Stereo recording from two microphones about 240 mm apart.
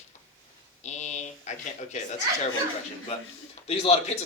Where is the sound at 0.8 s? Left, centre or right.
Left.